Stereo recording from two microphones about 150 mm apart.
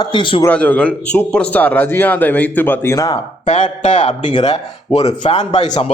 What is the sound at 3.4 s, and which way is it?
Speech, 55° left (ahead or behind).